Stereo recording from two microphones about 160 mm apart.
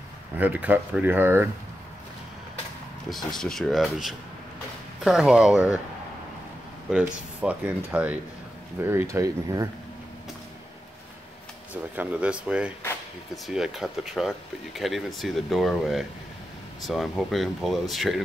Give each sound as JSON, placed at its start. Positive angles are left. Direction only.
{"t": 0.4, "sound": "speech", "side_deg": -10}
{"t": 3.3, "sound": "speech", "side_deg": 5}
{"t": 6.9, "sound": "speech", "side_deg": -10}
{"t": 11.7, "sound": "speech", "side_deg": -10}